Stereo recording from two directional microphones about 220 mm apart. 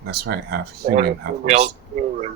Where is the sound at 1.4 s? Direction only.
30° right (ahead or behind).